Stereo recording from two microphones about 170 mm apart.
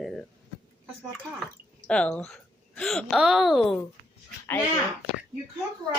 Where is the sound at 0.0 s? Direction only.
Centre (ahead or behind).